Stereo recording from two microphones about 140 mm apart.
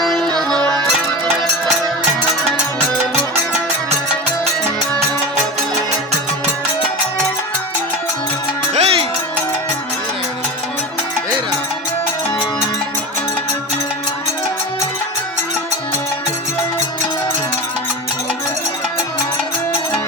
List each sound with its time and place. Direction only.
0.0 s music: centre (ahead or behind)
8.7 s music: 45° right (ahead or behind)